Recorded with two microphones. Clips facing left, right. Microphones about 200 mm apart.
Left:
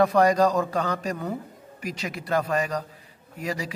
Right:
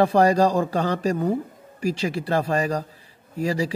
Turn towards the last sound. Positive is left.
turn(degrees=-30)  # may be behind; listen again after turning